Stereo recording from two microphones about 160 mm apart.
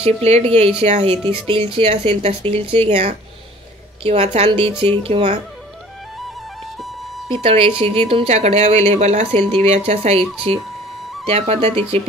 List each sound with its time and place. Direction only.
0.0 s speech: 40° right (ahead or behind)
7.2 s speech: 35° right (ahead or behind)